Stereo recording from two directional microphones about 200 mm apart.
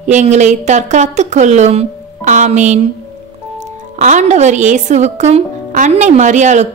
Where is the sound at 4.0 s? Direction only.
35° right (ahead or behind).